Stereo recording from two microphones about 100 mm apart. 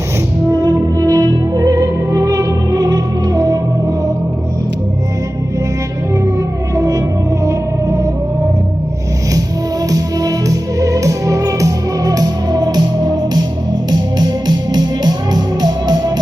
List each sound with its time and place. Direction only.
0.6 s music: 35° right (ahead or behind)
6.7 s music: 35° right (ahead or behind)
9.9 s music: 35° right (ahead or behind)